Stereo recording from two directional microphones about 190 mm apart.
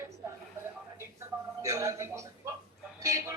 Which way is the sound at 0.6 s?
15° right (ahead or behind).